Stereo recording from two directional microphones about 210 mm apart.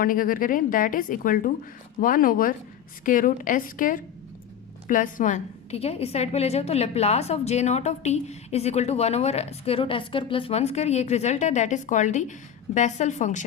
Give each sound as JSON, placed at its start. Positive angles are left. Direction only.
{"t": 0.0, "sound": "a woman's voice", "side_deg": 40}